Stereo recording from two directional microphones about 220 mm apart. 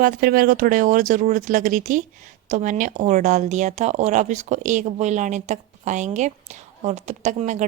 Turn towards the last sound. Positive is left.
turn(degrees=-30)  # may be behind; listen again after turning